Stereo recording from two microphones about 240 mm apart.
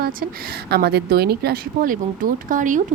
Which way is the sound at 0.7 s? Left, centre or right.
Right.